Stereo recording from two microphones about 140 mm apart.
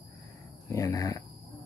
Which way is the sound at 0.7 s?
20° left (ahead or behind).